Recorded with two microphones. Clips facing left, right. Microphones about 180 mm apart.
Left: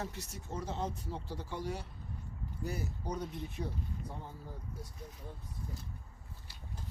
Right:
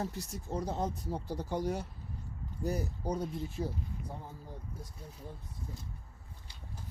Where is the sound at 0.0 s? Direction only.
35° right (ahead or behind).